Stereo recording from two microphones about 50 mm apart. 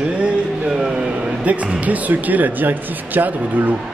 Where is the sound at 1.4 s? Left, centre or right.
Right.